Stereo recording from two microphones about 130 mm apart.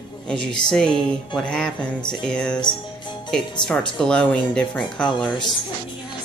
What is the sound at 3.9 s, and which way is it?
Speech, 5° left (ahead or behind).